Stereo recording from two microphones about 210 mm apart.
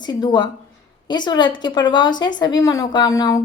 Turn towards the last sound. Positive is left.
turn(degrees=15)  # may be behind; listen again after turning